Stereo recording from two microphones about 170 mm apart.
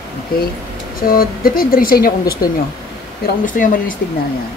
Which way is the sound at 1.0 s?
60° left (ahead or behind).